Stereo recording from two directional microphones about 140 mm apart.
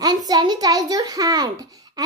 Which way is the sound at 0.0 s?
30° right (ahead or behind).